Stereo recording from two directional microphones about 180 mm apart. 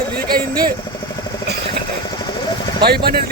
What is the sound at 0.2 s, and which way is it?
Speech, 55° right (ahead or behind).